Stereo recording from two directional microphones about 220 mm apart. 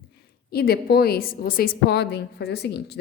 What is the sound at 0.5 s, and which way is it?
A woman's voice, 45° left (ahead or behind).